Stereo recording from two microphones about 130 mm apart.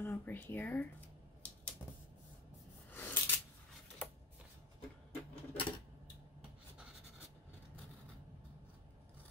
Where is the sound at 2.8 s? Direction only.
15° left (ahead or behind).